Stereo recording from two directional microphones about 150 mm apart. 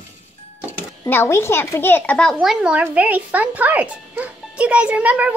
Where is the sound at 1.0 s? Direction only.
15° left (ahead or behind).